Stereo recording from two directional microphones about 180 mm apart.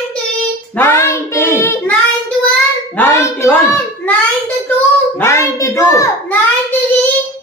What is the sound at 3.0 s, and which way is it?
Speech, 10° left (ahead or behind).